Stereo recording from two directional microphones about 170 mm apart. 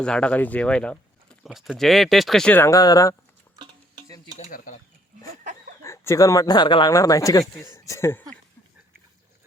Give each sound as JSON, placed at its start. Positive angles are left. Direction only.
{"t": 0.0, "sound": "speech", "side_deg": 5}
{"t": 3.5, "sound": "stir", "side_deg": -25}
{"t": 4.4, "sound": "speech", "side_deg": 50}
{"t": 5.8, "sound": "speech", "side_deg": 15}